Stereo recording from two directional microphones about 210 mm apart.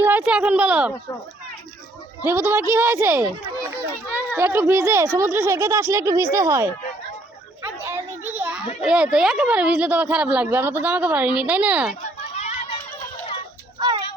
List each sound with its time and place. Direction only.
0.0 s a woman's voice: 5° right (ahead or behind)
2.2 s speech: 10° right (ahead or behind)
4.3 s speech: 10° right (ahead or behind)
7.8 s a child's voice: 10° right (ahead or behind)
12.2 s a sound: 35° left (ahead or behind)
13.7 s a sound: 20° right (ahead or behind)